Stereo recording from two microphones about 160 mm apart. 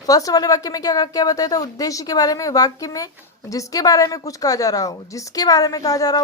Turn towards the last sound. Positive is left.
turn(degrees=25)  # may be behind; listen again after turning